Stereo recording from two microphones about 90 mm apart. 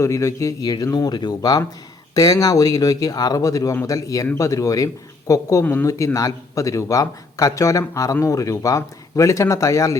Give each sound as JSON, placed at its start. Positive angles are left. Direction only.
{"t": 0.0, "sound": "a man's voice", "side_deg": 35}
{"t": 0.6, "sound": "a man's voice", "side_deg": 50}